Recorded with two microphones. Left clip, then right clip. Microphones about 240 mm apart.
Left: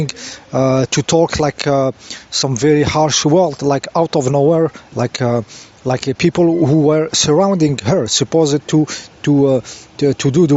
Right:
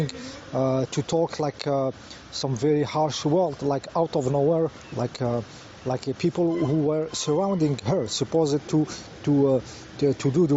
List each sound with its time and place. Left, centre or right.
0.1 s speech: left